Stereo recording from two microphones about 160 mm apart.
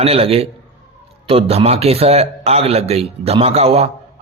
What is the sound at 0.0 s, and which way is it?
A man's voice, 35° right (ahead or behind).